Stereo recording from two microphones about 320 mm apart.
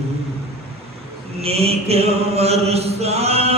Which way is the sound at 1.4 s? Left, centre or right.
Centre.